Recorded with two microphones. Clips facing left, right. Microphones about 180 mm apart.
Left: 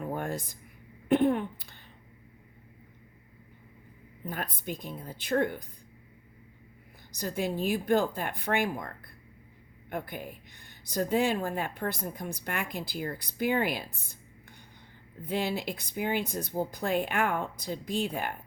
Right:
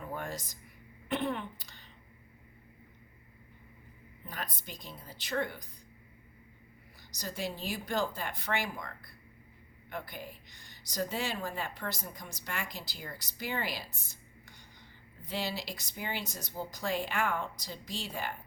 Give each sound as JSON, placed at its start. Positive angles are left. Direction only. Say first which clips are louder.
{"t": 0.0, "sound": "music", "louder": "left 6 dB", "side_deg": 50}
{"t": 1.0, "sound": "throat clearing", "louder": "left 9 dB", "side_deg": 50}
{"t": 4.3, "sound": "speech", "louder": "left 7 dB", "side_deg": 55}
{"t": 7.2, "sound": "speech", "louder": "left 7 dB", "side_deg": 55}
{"t": 15.2, "sound": "speech", "louder": "left 6 dB", "side_deg": 55}